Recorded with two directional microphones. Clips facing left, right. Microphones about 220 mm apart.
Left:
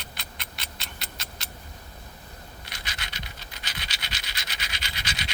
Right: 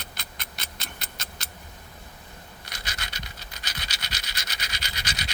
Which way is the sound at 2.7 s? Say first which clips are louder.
Right 2 dB; 40° right (ahead or behind).